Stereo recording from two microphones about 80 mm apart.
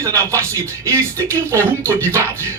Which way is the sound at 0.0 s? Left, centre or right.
Right.